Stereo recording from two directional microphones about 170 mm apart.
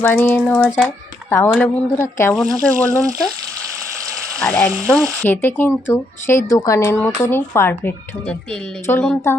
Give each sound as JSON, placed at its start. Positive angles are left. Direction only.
{"t": 0.0, "sound": "speech", "side_deg": 10}
{"t": 2.3, "sound": "speech", "side_deg": 0}
{"t": 4.4, "sound": "speech", "side_deg": 5}